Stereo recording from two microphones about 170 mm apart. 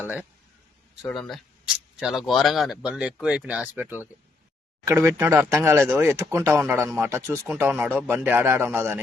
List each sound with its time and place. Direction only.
0.0 s speech: 10° right (ahead or behind)
1.0 s speech: 5° left (ahead or behind); by 9.0 s 15° right (ahead or behind)